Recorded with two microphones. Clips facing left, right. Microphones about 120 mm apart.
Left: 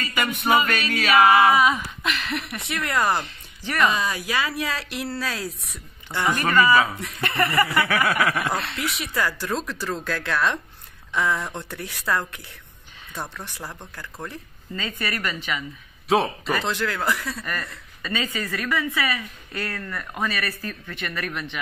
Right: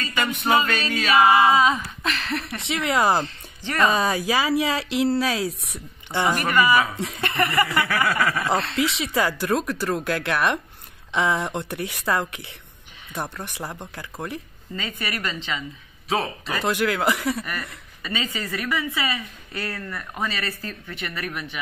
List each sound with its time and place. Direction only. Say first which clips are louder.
0.0 s music: even; 10° left (ahead or behind)
1.4 s chuckle: even; 25° right (ahead or behind)
2.0 s a sound: right 1 dB; 35° right (ahead or behind)
2.7 s speech: right 3 dB; 25° right (ahead or behind)
4.1 s chuckle: right 5 dB; 30° right (ahead or behind)
5.4 s speech: right 5 dB; 70° right (ahead or behind)
6.1 s speech: even; 20° right (ahead or behind)
7.0 s chuckle: right 1 dB; 20° right (ahead or behind)
7.9 s snicker: left 1 dB; 15° left (ahead or behind)
8.7 s speech: right 6 dB; 90° right
9.1 s speech: right 2 dB; 15° right (ahead or behind)
16.1 s speech: left 4 dB; centre (ahead or behind)
16.5 s speech: right 5 dB; 10° right (ahead or behind)